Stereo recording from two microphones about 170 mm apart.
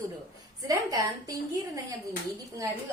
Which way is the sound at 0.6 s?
20° right (ahead or behind).